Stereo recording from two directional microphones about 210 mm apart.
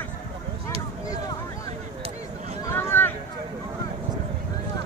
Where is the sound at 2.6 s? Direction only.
15° left (ahead or behind).